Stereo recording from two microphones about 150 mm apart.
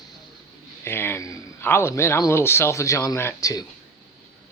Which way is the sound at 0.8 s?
15° left (ahead or behind).